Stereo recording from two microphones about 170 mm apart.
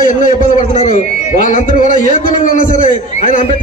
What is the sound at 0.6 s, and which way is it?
A man's voice, 45° left (ahead or behind).